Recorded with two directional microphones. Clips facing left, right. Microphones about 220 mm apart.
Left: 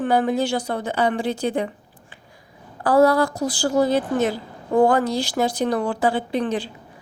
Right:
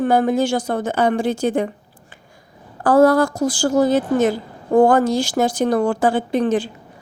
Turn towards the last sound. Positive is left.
turn(degrees=-45)  # may be behind; listen again after turning